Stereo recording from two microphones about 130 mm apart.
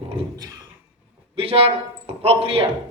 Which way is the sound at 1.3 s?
50° right (ahead or behind).